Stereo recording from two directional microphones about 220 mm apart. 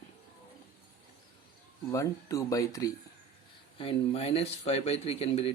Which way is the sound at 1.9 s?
15° left (ahead or behind).